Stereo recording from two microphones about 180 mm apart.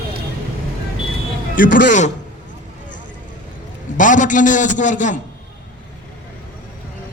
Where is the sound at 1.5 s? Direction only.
50° left (ahead or behind).